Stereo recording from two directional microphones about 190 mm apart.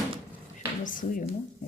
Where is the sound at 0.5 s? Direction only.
45° left (ahead or behind).